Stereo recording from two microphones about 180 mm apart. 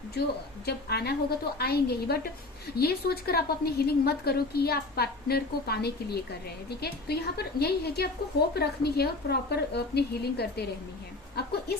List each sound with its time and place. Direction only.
0.6 s a woman's voice: 65° left (ahead or behind)